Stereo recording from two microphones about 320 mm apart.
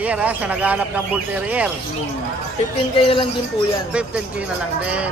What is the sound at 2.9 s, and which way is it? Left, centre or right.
Speech, centre.